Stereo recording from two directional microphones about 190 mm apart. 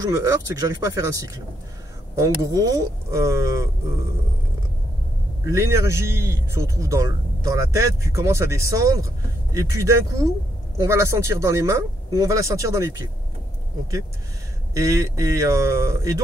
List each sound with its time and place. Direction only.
0.1 s speech: 15° right (ahead or behind)
5.5 s speech: 15° right (ahead or behind)
14.7 s speech: 15° right (ahead or behind)